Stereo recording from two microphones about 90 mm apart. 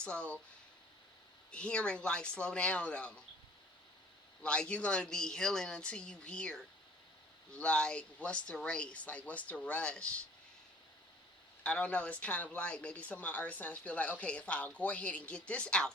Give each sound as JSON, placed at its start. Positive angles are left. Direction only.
{"t": 0.0, "sound": "speech", "side_deg": 10}
{"t": 1.5, "sound": "speech", "side_deg": 10}
{"t": 4.4, "sound": "speech", "side_deg": 10}
{"t": 11.6, "sound": "speech", "side_deg": 15}